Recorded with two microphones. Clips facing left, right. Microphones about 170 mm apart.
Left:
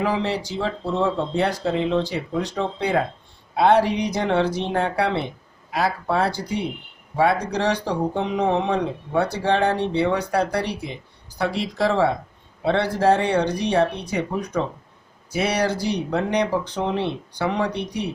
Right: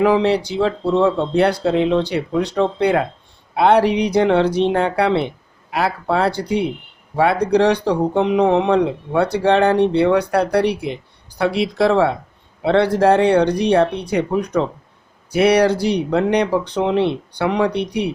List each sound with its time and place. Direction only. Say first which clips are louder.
0.0 s speech: right 8 dB; 65° right (ahead or behind)